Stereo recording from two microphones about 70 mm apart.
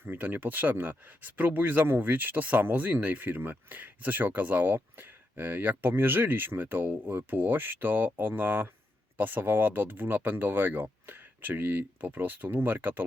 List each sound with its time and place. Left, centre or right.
0.0 s speech: right